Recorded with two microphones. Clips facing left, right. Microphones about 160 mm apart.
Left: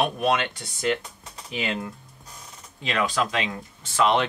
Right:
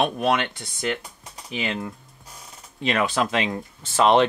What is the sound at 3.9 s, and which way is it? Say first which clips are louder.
Speech: right 4 dB; 30° right (ahead or behind).